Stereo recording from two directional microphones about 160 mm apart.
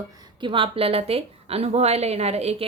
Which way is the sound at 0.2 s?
30° right (ahead or behind).